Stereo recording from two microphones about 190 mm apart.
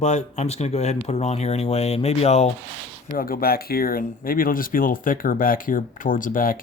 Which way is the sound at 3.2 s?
50° left (ahead or behind).